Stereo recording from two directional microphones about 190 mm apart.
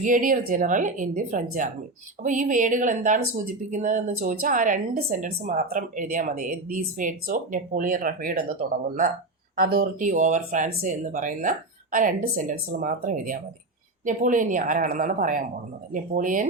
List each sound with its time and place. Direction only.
0.0 s speech: 45° right (ahead or behind)